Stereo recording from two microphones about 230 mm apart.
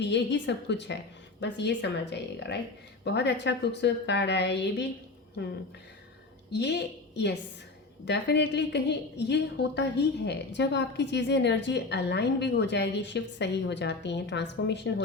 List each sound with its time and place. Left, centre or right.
0.0 s a woman's voice: left